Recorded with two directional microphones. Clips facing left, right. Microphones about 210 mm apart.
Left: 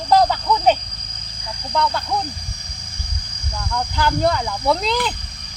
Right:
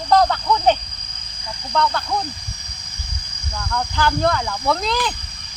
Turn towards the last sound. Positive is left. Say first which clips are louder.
# left 2 dB
turn(degrees=10)  # may be behind; listen again after turning